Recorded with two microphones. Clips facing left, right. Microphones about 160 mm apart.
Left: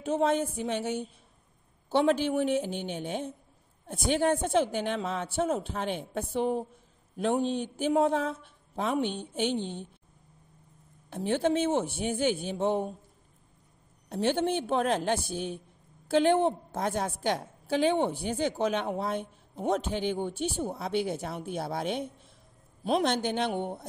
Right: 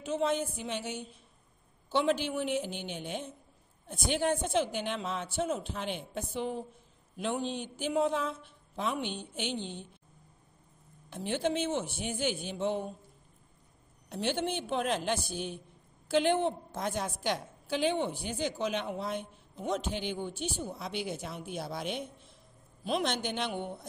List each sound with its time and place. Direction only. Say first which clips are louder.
0.0 s speech: left 4 dB; 50° left (ahead or behind)
11.1 s speech: left 5 dB; 50° left (ahead or behind)
14.1 s speech: left 5 dB; 50° left (ahead or behind)
16.2 s speech: left 4 dB; 45° left (ahead or behind); by 21.7 s 60° left (ahead or behind)
22.8 s speech: left 5 dB; 40° left (ahead or behind)